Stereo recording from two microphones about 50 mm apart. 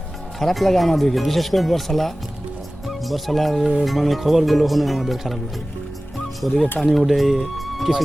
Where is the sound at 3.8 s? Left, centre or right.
Centre.